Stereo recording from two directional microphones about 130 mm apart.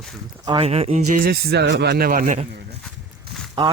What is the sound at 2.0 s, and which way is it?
Speech, 90° right.